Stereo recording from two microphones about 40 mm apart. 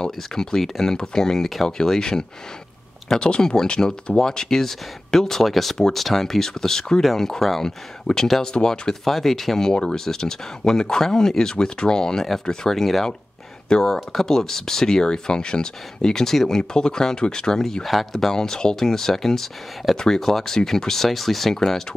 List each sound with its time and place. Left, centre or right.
0.0 s speech: centre
8.1 s speech: centre
9.0 s speech: centre